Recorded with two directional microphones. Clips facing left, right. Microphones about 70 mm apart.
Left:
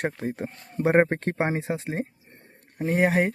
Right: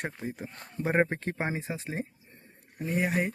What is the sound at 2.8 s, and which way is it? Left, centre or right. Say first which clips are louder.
Speech: left 7 dB; left.